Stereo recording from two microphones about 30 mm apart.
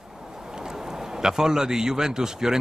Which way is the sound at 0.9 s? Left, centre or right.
Centre.